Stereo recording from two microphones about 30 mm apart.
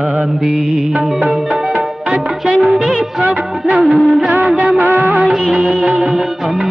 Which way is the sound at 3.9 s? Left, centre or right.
Right.